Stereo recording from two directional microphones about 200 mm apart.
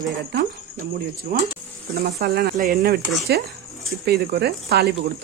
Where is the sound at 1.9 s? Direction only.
50° right (ahead or behind).